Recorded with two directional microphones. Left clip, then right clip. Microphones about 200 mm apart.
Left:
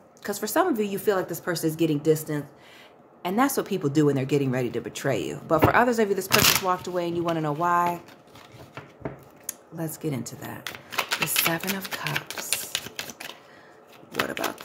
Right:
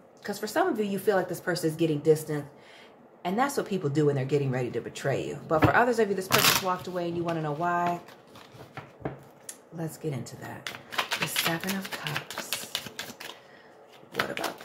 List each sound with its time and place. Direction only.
0.2 s a woman's voice: 35° left (ahead or behind)
9.5 s speech: 30° left (ahead or behind)
14.1 s typewriter: 30° left (ahead or behind)